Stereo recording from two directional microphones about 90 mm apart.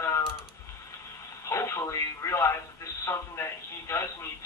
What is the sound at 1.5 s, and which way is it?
Speech, 35° left (ahead or behind).